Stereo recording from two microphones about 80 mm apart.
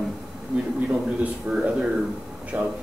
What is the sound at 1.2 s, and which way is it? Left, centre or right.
A man's voice, centre.